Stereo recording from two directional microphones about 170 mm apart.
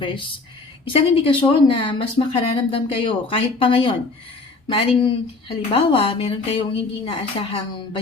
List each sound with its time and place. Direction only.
0.9 s speech: 35° left (ahead or behind)